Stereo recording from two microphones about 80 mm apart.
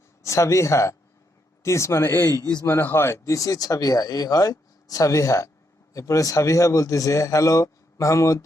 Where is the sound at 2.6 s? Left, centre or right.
Left.